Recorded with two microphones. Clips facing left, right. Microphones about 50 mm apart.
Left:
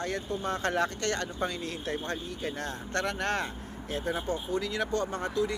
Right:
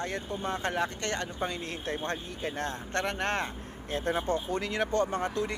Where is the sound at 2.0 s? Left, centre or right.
Right.